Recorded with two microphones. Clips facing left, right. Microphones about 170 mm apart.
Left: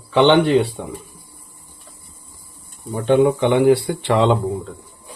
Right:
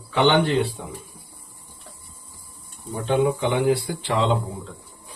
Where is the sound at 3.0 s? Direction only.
60° left (ahead or behind).